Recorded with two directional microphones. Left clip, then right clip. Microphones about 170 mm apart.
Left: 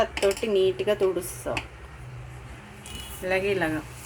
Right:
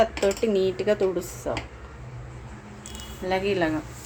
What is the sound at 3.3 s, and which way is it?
Speech, 10° right (ahead or behind).